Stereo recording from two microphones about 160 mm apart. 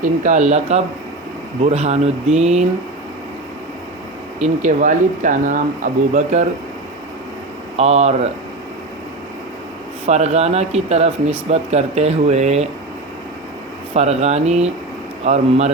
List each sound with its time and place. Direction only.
0.0 s speech: 50° right (ahead or behind)
4.4 s speech: 50° right (ahead or behind)
7.8 s speech: 40° right (ahead or behind)
10.1 s speech: 45° right (ahead or behind)
13.9 s speech: 40° right (ahead or behind)